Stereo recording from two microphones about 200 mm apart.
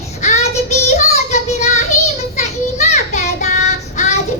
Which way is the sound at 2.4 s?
35° left (ahead or behind).